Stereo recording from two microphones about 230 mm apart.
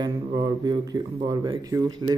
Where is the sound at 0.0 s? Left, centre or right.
Centre.